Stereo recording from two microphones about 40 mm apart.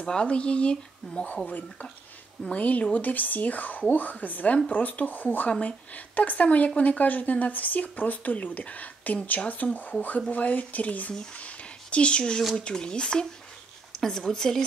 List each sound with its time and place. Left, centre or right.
0.0 s speech: left
2.5 s speech: left
11.3 s a sound: left
12.5 s speech: left